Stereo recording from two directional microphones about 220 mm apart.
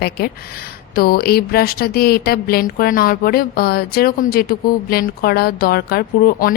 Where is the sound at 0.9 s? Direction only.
45° left (ahead or behind).